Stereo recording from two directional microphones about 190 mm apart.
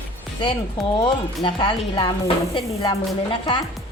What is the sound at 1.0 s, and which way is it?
Speech, 25° left (ahead or behind).